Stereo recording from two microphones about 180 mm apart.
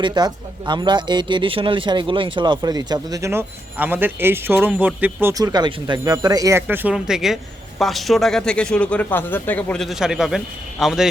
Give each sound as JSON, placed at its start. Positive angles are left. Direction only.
{"t": 0.0, "sound": "speech", "side_deg": -25}
{"t": 5.3, "sound": "a man's voice", "side_deg": -20}